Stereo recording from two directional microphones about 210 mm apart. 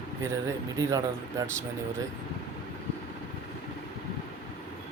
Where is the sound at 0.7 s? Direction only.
15° right (ahead or behind).